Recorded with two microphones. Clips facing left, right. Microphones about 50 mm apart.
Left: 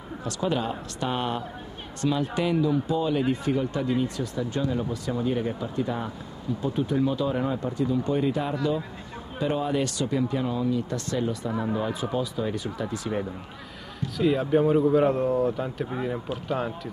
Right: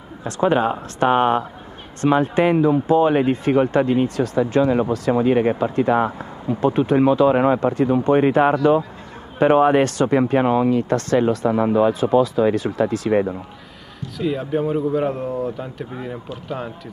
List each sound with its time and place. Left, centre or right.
0.2 s speech: right
7.7 s speech: right
14.1 s speech: centre